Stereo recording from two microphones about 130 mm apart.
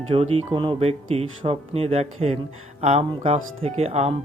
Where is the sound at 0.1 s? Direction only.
50° right (ahead or behind).